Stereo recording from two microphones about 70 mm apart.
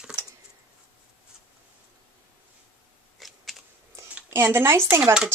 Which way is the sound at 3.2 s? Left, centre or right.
Centre.